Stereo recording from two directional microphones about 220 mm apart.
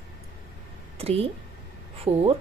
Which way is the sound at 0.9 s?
25° right (ahead or behind).